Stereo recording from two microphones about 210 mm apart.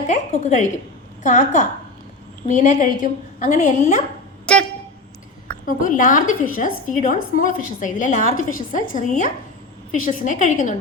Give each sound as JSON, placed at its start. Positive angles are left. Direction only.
{"t": 0.1, "sound": "a woman's voice", "side_deg": 35}
{"t": 5.6, "sound": "a woman's voice", "side_deg": 40}